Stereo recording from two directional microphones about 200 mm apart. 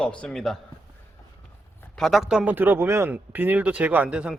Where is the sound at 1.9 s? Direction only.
Centre (ahead or behind).